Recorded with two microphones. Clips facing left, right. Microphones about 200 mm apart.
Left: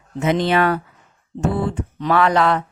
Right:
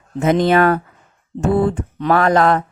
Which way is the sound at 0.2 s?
45° right (ahead or behind).